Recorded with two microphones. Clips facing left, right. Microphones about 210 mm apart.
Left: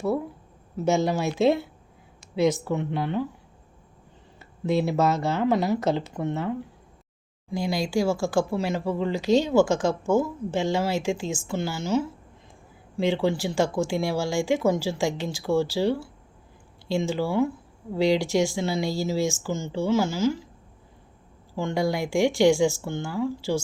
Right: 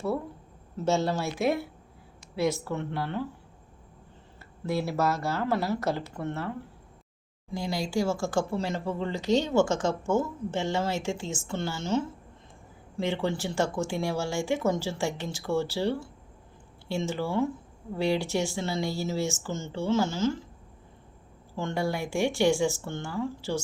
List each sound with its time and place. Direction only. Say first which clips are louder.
0.9 s speech: left 3 dB; 15° left (ahead or behind)
4.4 s speech: left 6 dB; 20° left (ahead or behind)
7.5 s speech: left 4 dB; 15° left (ahead or behind)
21.5 s speech: left 4 dB; 10° left (ahead or behind)